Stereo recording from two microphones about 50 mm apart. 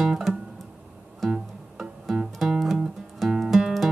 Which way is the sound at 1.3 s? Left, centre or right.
Centre.